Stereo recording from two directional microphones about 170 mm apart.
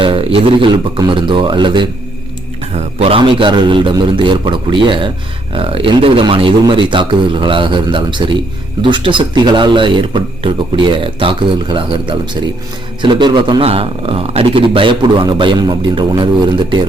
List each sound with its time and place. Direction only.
0.0 s a man's voice: 30° right (ahead or behind)